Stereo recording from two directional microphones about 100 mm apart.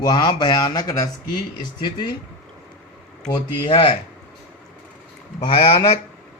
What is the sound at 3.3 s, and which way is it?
Speech, 55° left (ahead or behind).